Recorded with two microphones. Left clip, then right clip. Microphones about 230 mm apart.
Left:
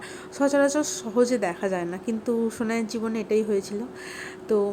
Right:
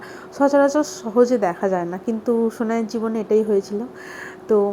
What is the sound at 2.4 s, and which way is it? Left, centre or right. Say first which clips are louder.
Speech: right 5 dB; centre.